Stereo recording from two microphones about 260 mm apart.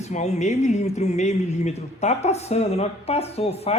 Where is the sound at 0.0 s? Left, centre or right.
Left.